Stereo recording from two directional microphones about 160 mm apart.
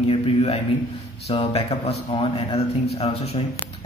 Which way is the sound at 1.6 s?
40° left (ahead or behind).